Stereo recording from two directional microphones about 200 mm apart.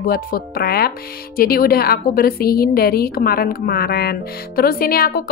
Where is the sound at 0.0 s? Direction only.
45° left (ahead or behind).